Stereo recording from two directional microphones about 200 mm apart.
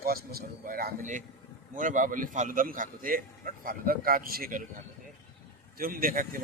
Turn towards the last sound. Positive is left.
turn(degrees=-45)  # may be behind; listen again after turning